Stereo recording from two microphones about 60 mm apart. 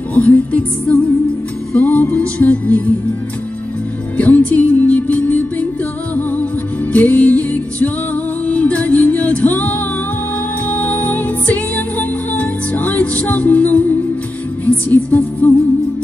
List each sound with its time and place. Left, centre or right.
0.1 s music: left
4.2 s music: left
6.9 s music: left